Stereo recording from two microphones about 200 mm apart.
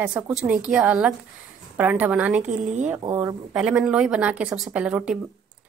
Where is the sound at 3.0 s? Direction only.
15° right (ahead or behind).